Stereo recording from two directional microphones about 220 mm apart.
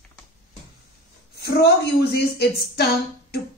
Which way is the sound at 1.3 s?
50° left (ahead or behind).